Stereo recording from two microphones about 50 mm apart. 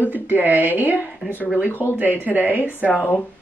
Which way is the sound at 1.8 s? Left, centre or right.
Right.